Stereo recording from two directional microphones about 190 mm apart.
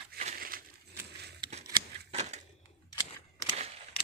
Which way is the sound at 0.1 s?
45° right (ahead or behind).